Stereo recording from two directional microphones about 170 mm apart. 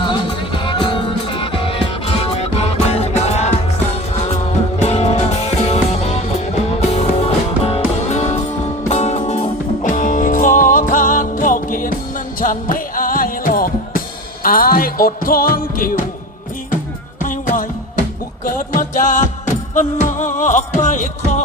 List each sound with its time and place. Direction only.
0.0 s music: 30° left (ahead or behind); by 16.0 s 60° left (ahead or behind)
17.2 s music: 50° left (ahead or behind)